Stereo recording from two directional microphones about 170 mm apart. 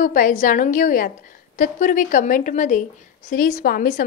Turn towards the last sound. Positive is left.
turn(degrees=55)  # may be behind; listen again after turning